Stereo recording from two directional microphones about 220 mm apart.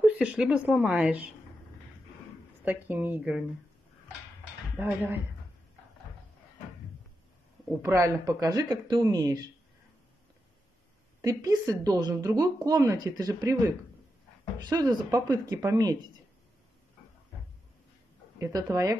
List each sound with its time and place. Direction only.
0.0 s a woman's voice: 5° right (ahead or behind)
2.6 s speech: 10° right (ahead or behind)
4.7 s speech: 10° right (ahead or behind)
7.8 s speech: 15° right (ahead or behind)
11.1 s speech: 15° right (ahead or behind)
14.6 s speech: 20° right (ahead or behind)
18.4 s speech: 15° right (ahead or behind)